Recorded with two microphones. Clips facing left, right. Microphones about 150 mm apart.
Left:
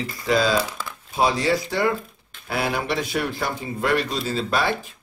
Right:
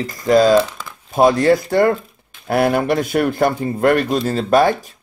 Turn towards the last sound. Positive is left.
turn(degrees=-40)  # may be behind; listen again after turning